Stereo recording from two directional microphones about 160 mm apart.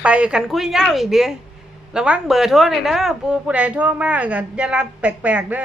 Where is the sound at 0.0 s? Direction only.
5° right (ahead or behind).